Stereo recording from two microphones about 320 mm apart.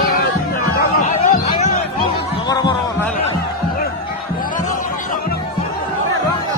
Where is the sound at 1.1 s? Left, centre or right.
Left.